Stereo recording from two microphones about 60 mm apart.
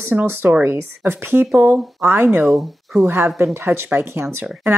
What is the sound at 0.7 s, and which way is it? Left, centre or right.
Speech, right.